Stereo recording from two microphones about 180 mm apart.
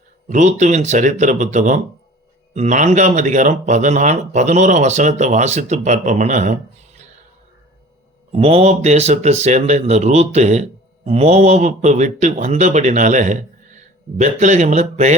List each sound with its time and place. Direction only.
0.3 s speech: 40° right (ahead or behind)
8.3 s speech: 35° right (ahead or behind)